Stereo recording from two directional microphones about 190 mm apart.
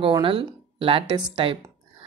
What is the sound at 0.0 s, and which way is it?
Speech, 30° right (ahead or behind).